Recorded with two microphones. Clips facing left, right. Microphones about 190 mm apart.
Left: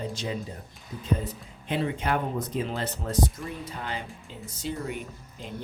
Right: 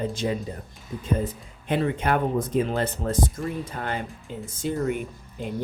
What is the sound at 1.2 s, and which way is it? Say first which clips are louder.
Speech: right 5 dB; 50° right (ahead or behind).